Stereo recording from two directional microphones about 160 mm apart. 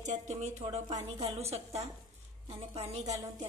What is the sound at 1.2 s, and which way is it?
Speech, 40° right (ahead or behind).